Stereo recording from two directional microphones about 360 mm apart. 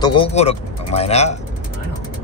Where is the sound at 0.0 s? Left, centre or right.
Centre.